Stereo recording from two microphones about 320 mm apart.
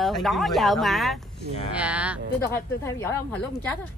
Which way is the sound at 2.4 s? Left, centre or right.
Centre.